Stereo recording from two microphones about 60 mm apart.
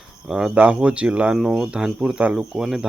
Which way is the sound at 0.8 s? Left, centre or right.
Right.